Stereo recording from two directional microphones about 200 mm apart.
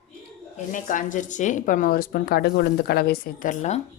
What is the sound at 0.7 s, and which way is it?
Speech, 40° left (ahead or behind).